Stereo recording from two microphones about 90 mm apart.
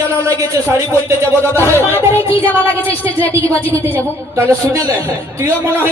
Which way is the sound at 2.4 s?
20° left (ahead or behind).